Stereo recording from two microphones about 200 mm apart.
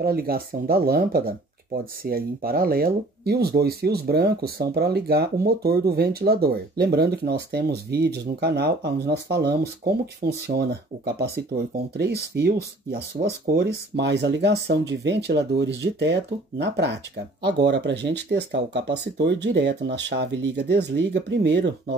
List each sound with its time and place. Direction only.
0.0 s speech: 50° right (ahead or behind)